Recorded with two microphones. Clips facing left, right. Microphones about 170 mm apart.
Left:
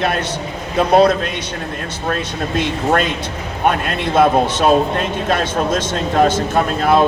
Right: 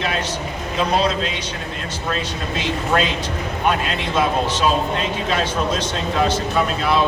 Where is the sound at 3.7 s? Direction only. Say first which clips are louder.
Left 4 dB; 55° left (ahead or behind).